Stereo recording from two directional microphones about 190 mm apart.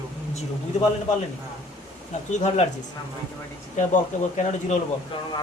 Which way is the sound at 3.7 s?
35° left (ahead or behind).